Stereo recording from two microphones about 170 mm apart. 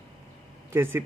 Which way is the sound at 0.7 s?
15° right (ahead or behind).